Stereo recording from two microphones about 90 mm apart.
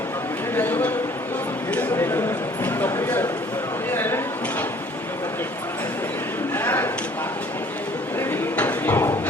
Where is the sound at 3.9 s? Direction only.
25° left (ahead or behind).